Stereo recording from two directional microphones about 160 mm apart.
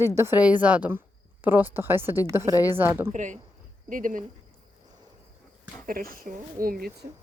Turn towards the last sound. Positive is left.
turn(degrees=-70)  # may be behind; listen again after turning